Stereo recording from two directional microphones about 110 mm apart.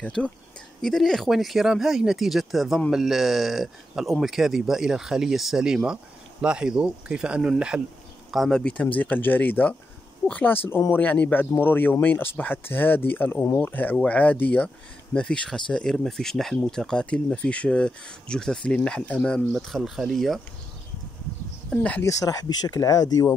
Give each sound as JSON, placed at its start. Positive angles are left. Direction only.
{"t": 0.0, "sound": "speech", "side_deg": 10}
{"t": 8.3, "sound": "speech", "side_deg": 5}
{"t": 21.6, "sound": "speech", "side_deg": 10}
{"t": 22.0, "sound": "speech", "side_deg": 30}